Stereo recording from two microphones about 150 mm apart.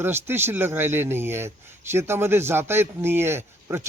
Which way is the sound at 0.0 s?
15° right (ahead or behind).